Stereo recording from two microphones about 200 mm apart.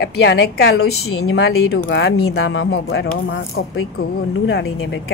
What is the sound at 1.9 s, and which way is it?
Speech, 60° left (ahead or behind).